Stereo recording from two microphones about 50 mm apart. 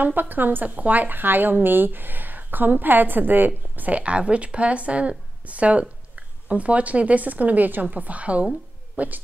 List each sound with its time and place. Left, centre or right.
0.0 s a woman's voice: right